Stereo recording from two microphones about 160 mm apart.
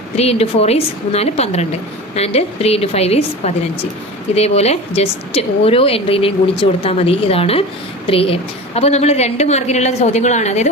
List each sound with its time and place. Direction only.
0.2 s a woman's voice: 40° left (ahead or behind)